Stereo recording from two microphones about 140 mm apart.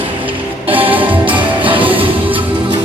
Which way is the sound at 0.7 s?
40° right (ahead or behind).